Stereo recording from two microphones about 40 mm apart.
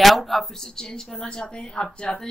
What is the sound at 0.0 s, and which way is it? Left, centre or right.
Speech, centre.